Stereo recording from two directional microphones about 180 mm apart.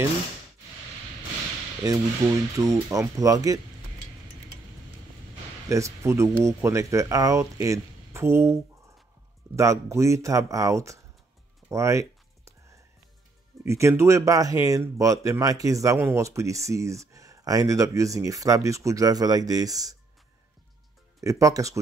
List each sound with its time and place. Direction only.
1.9 s speech: 20° right (ahead or behind)
5.7 s speech: 15° right (ahead or behind)
9.6 s speech: 15° right (ahead or behind)
11.7 s typing: 15° right (ahead or behind)
13.7 s speech: 15° right (ahead or behind)
21.2 s speech: 20° right (ahead or behind)